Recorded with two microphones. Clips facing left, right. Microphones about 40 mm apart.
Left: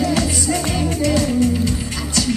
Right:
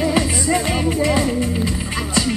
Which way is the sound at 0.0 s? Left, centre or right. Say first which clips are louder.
Right 1 dB; right.